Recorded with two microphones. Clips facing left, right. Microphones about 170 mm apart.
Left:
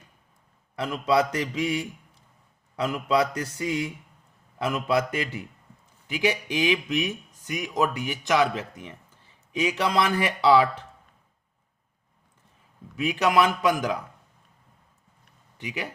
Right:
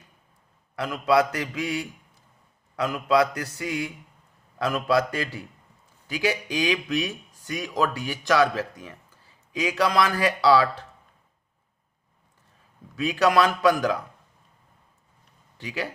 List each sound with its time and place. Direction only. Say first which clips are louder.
0.8 s speech: right 2 dB; 25° left (ahead or behind)
13.0 s speech: right 1 dB; 20° left (ahead or behind)
15.5 s speech: right 2 dB; 20° left (ahead or behind)